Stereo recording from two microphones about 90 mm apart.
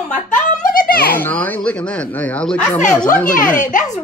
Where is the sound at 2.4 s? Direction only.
15° left (ahead or behind).